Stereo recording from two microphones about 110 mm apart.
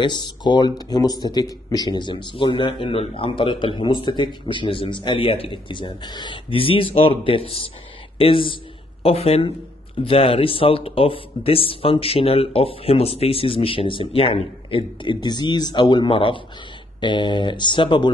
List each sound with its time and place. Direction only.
0.0 s speech: 45° left (ahead or behind)
9.0 s speech: 65° left (ahead or behind)
10.0 s speech: 55° left (ahead or behind)